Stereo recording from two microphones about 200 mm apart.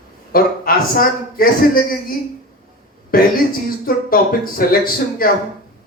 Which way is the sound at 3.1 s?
45° left (ahead or behind).